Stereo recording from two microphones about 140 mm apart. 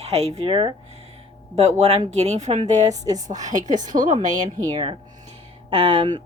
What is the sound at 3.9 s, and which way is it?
Speech, 65° right (ahead or behind).